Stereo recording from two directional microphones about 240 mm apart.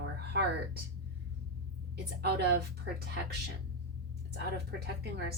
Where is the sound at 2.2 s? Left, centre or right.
Right.